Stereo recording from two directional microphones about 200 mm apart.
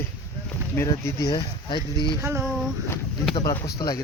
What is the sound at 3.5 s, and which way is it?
Speech, 20° left (ahead or behind).